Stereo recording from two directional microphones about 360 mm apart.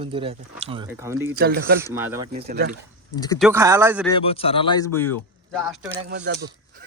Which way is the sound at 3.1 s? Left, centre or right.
Centre.